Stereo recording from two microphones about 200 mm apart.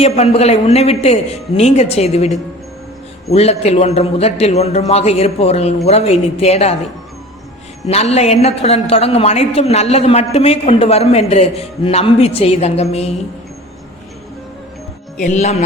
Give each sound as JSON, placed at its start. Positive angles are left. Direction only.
{"t": 0.0, "sound": "a man's voice", "side_deg": 30}
{"t": 7.9, "sound": "a man's voice", "side_deg": 30}
{"t": 15.2, "sound": "a man's voice", "side_deg": 35}